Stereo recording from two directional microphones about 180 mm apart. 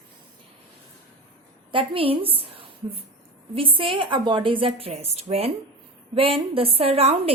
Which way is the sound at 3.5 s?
30° right (ahead or behind).